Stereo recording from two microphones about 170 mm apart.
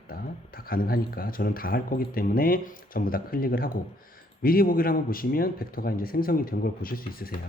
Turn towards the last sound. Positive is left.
turn(degrees=60)  # may be behind; listen again after turning